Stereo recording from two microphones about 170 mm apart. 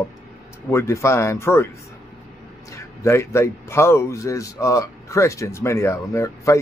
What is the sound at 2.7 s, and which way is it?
A man's voice, 15° left (ahead or behind).